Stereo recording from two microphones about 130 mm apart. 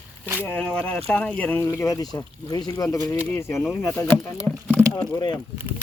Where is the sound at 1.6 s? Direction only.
20° left (ahead or behind).